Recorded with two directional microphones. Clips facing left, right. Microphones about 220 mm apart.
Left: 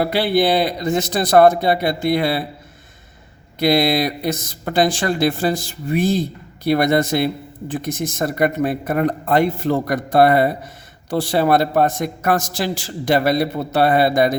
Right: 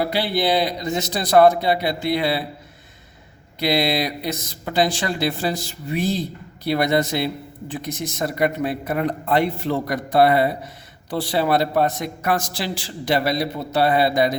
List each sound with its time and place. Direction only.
0.0 s a man's voice: 50° left (ahead or behind)
3.6 s a man's voice: 50° left (ahead or behind)